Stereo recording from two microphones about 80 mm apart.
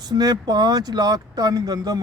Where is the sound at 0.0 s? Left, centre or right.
Right.